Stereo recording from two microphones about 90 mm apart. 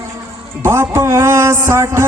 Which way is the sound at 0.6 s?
30° right (ahead or behind).